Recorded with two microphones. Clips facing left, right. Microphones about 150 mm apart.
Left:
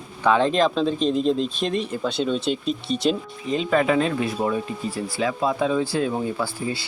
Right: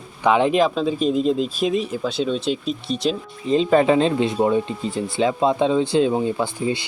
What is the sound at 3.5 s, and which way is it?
Speech, 30° right (ahead or behind).